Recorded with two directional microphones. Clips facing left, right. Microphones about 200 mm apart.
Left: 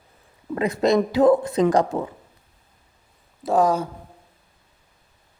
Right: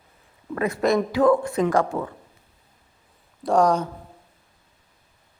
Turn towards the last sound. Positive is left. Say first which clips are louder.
# even
turn(degrees=5)  # may be behind; listen again after turning